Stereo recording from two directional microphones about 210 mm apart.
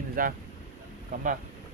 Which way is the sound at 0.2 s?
40° right (ahead or behind).